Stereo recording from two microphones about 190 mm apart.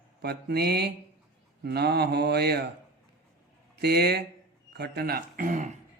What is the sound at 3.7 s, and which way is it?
A man's voice, 60° right (ahead or behind).